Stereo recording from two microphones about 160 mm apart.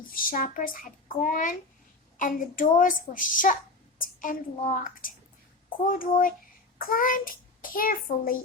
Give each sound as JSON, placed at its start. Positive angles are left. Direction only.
{"t": 0.1, "sound": "a child's voice", "side_deg": 60}